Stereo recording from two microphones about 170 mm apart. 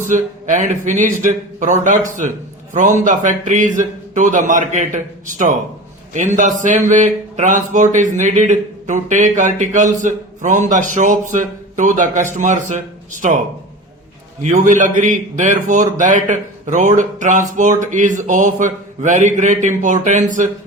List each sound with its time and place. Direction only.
0.0 s a man's voice: 50° right (ahead or behind)
14.4 s a man's voice: 45° right (ahead or behind)